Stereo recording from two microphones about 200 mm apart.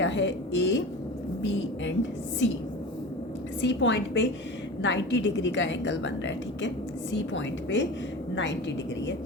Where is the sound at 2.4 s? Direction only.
65° left (ahead or behind).